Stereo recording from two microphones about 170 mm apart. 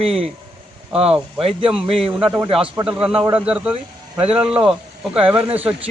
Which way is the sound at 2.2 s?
20° right (ahead or behind).